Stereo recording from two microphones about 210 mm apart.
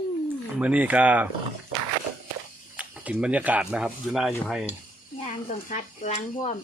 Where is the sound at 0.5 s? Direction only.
5° right (ahead or behind).